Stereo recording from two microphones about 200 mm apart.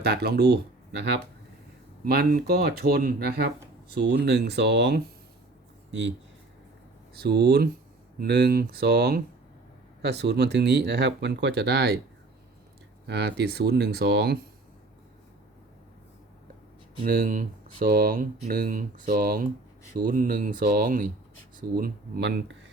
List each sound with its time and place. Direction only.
0.0 s speech: 55° right (ahead or behind)
7.2 s speech: 55° right (ahead or behind)
13.1 s speech: 55° right (ahead or behind)
17.0 s speech: 45° right (ahead or behind)